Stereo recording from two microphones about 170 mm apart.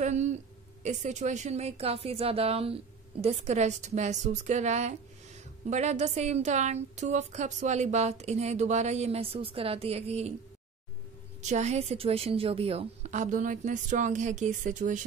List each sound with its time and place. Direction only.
0.0 s a sound: 45° right (ahead or behind)
0.8 s a woman's voice: 45° right (ahead or behind)
11.4 s a woman's voice: 40° right (ahead or behind)